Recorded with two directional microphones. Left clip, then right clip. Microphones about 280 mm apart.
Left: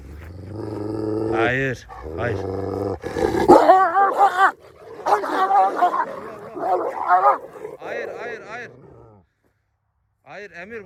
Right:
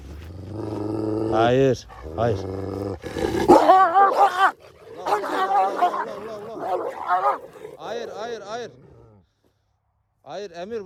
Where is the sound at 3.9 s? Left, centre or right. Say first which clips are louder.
Even; centre.